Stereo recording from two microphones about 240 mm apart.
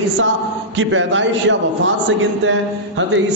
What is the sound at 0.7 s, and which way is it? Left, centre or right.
Speech, right.